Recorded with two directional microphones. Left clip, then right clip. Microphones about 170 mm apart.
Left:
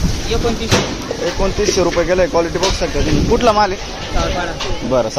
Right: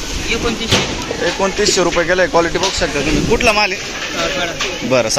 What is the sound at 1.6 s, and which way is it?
Speech, 10° left (ahead or behind).